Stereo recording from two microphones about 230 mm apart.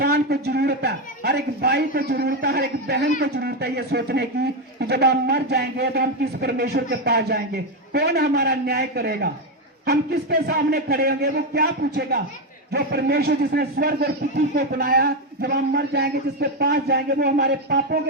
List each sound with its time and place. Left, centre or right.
0.0 s a man's voice: right